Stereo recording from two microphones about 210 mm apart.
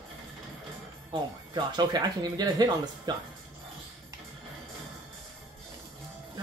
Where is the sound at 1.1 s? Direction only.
20° right (ahead or behind).